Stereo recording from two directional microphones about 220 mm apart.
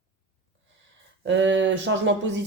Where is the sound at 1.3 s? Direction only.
55° right (ahead or behind).